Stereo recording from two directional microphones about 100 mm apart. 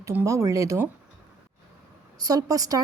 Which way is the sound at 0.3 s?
30° right (ahead or behind).